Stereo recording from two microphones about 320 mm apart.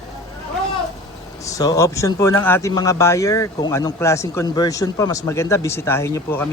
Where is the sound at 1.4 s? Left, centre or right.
Centre.